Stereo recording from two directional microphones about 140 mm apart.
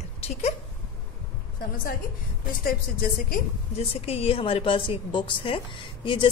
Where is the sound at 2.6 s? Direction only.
90° left.